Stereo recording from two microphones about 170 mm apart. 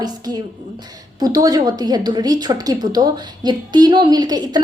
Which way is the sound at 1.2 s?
20° right (ahead or behind).